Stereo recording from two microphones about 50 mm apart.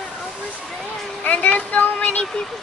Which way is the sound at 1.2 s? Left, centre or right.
Left.